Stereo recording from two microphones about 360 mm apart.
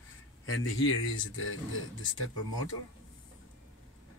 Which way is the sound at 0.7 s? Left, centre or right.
Left.